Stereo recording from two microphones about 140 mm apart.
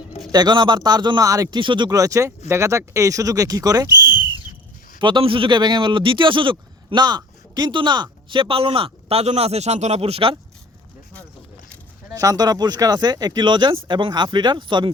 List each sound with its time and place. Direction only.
0.3 s a man's voice: 30° right (ahead or behind)
4.9 s a man's voice: 35° right (ahead or behind)
12.1 s a man's voice: 25° right (ahead or behind)